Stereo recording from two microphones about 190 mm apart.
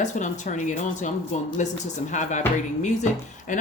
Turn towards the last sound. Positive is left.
turn(degrees=40)  # may be behind; listen again after turning